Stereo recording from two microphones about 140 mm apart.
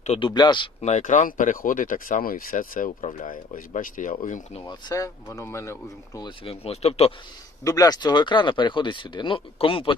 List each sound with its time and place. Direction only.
0.2 s speech: 35° left (ahead or behind)
0.8 s speech: 55° left (ahead or behind); by 2.9 s 75° left (ahead or behind)
3.0 s speech: 65° left (ahead or behind)
4.6 s speech: 30° left (ahead or behind)
6.4 s speech: 45° left (ahead or behind)
7.6 s speech: 25° left (ahead or behind); by 9.9 s 40° left (ahead or behind)